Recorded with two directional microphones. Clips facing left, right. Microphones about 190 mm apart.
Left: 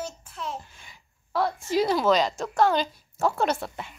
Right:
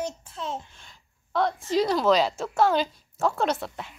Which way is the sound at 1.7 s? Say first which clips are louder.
Even; 5° left (ahead or behind).